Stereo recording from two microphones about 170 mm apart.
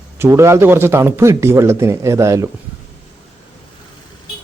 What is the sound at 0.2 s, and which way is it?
Speech, 15° right (ahead or behind).